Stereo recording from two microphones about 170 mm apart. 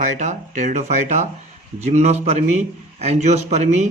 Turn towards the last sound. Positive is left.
turn(degrees=-40)  # may be behind; listen again after turning